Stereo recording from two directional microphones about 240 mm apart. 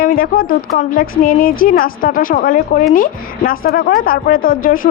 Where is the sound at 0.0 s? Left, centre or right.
Left.